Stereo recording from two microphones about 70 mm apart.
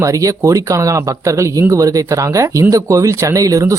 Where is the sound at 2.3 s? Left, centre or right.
Right.